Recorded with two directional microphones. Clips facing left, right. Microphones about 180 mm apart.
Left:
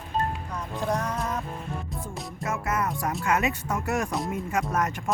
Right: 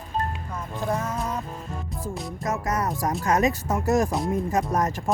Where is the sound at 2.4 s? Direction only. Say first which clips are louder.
Right 2 dB; 35° right (ahead or behind).